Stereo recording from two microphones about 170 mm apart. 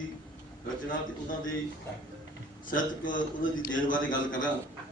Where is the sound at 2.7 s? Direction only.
50° left (ahead or behind).